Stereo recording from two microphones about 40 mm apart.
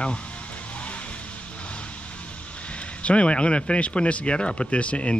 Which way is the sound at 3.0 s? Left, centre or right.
Left.